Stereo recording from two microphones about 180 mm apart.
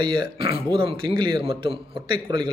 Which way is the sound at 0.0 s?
25° right (ahead or behind).